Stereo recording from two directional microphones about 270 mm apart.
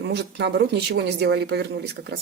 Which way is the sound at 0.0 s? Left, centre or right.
Right.